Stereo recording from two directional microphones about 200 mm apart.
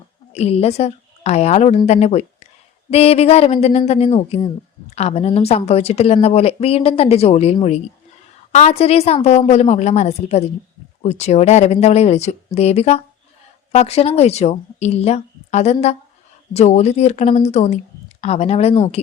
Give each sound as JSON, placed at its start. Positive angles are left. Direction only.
{"t": 0.3, "sound": "a woman's voice", "side_deg": 30}